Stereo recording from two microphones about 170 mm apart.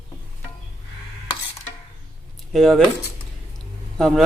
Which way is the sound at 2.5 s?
Centre (ahead or behind).